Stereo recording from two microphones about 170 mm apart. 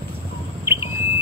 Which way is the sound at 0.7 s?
15° right (ahead or behind).